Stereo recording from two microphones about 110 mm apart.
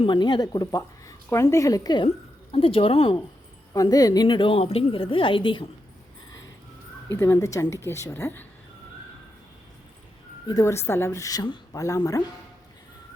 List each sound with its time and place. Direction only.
0.0 s speech: 45° left (ahead or behind)
2.5 s a woman's voice: 60° left (ahead or behind)
3.7 s a woman's voice: 35° left (ahead or behind); by 5.6 s 50° left (ahead or behind)
7.1 s speech: 25° left (ahead or behind)
10.4 s speech: 35° left (ahead or behind)